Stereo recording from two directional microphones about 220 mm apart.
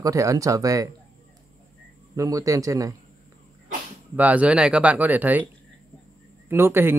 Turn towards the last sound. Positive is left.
turn(degrees=-10)  # may be behind; listen again after turning